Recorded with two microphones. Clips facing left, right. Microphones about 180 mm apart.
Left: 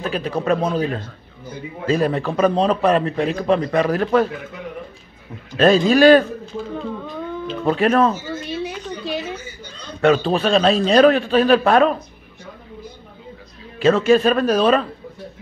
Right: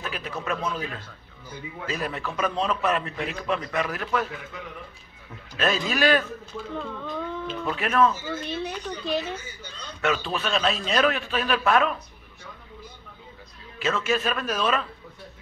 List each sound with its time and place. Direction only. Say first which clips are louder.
0.0 s a man's voice: left 10 dB; 35° left (ahead or behind)
5.6 s a man's voice: left 12 dB; 35° left (ahead or behind)
6.7 s speech: left 1 dB; 10° left (ahead or behind)
7.6 s a man's voice: left 7 dB; 35° left (ahead or behind)
8.3 s a sound: left 4 dB; 5° left (ahead or behind)
10.0 s a man's voice: left 11 dB; 35° left (ahead or behind)
13.7 s a man's voice: left 11 dB; 35° left (ahead or behind)